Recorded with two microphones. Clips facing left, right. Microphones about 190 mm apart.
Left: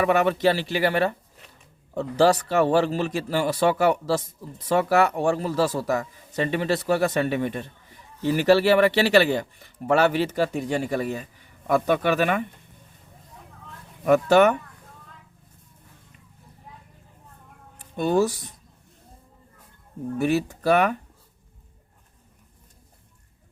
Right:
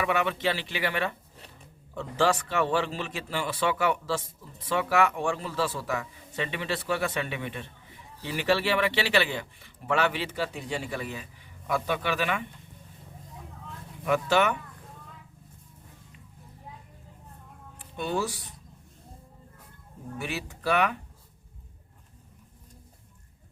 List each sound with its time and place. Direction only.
0.0 s a man's voice: 45° left (ahead or behind)
14.0 s speech: 45° left (ahead or behind)
17.9 s speech: 45° left (ahead or behind)
20.1 s speech: 45° left (ahead or behind)